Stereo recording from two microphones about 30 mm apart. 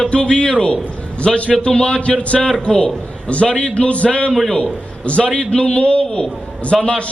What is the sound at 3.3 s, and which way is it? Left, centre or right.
A man's voice, left.